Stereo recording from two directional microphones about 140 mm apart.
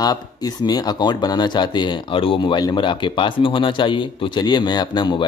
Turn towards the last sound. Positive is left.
turn(degrees=30)  # may be behind; listen again after turning